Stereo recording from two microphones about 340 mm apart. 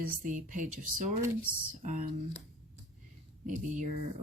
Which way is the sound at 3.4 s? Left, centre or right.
Right.